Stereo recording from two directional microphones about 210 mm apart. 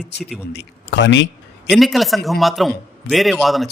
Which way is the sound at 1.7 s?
Centre (ahead or behind).